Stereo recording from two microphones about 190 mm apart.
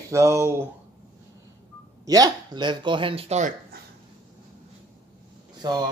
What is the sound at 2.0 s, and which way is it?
Speech, 20° right (ahead or behind).